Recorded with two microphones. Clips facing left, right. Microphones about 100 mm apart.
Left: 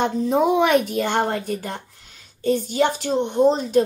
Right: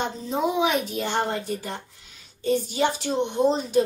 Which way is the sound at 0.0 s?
55° left (ahead or behind).